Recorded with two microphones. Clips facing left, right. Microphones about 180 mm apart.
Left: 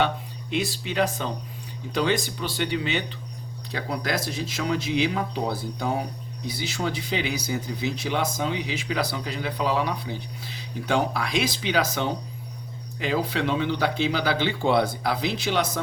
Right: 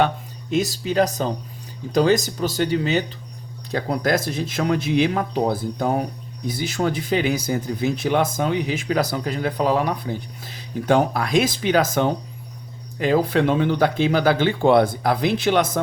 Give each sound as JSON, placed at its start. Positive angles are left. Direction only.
{"t": 0.5, "sound": "speech", "side_deg": -40}